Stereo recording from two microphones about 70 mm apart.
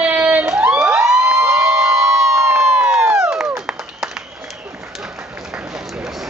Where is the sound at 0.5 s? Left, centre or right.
Right.